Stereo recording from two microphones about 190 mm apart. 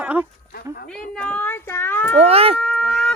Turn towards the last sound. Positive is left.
turn(degrees=0)  # may be behind; listen again after turning